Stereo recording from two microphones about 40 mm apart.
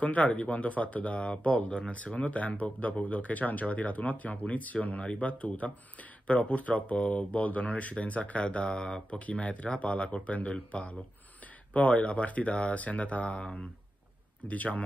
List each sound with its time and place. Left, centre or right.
0.0 s speech: left
14.5 s speech: left